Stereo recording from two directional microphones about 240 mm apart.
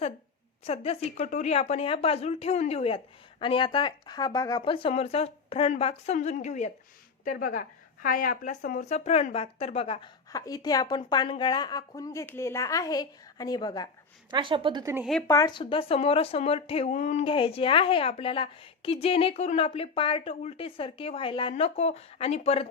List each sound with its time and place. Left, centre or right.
0.6 s speech: left
14.3 s speech: centre
15.3 s speech: centre